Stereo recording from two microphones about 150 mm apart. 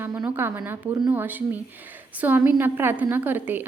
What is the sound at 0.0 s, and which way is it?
A woman's voice, 15° right (ahead or behind).